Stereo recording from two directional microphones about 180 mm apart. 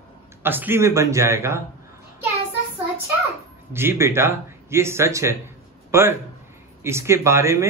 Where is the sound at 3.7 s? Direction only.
15° right (ahead or behind).